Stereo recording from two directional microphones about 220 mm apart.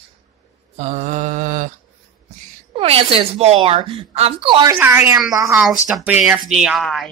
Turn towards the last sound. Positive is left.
turn(degrees=0)  # may be behind; listen again after turning